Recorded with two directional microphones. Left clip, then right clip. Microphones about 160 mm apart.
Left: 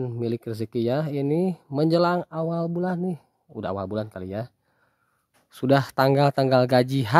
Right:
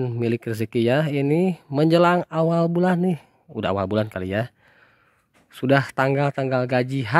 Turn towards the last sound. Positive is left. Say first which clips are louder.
# left 2 dB
turn(degrees=15)  # may be behind; listen again after turning